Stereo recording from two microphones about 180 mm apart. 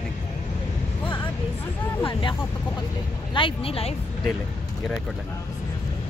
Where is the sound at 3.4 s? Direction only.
30° left (ahead or behind).